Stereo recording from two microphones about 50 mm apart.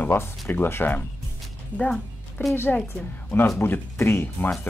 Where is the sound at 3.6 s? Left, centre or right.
Left.